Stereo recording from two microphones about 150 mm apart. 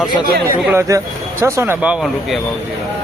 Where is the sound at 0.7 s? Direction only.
20° right (ahead or behind).